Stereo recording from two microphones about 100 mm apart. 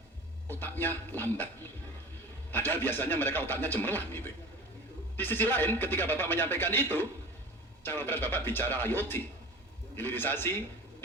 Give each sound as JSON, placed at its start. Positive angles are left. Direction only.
{"t": 0.4, "sound": "a man's voice", "side_deg": 20}
{"t": 2.5, "sound": "a man's voice", "side_deg": 20}